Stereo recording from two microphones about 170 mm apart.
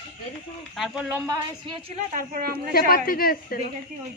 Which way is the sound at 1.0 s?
15° right (ahead or behind).